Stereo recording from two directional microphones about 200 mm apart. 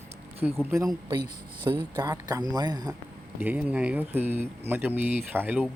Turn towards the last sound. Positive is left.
turn(degrees=-10)  # may be behind; listen again after turning